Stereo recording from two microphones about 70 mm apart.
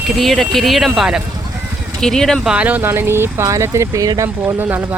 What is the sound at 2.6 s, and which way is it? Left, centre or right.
Speech, right.